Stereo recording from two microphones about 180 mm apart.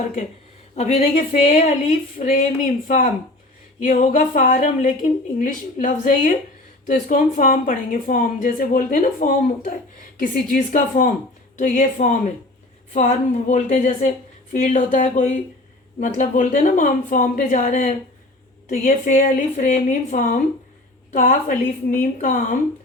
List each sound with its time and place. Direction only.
0.8 s speech: 40° left (ahead or behind)